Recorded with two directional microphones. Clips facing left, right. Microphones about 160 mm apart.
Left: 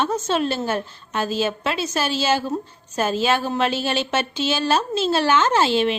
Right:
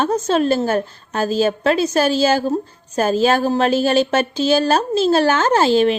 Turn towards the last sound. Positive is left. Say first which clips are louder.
# right 5 dB
turn(degrees=-40)  # may be behind; listen again after turning